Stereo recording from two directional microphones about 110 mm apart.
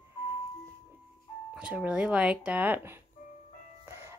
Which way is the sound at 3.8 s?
25° right (ahead or behind).